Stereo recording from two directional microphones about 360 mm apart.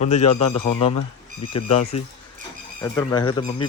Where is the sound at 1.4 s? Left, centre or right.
Centre.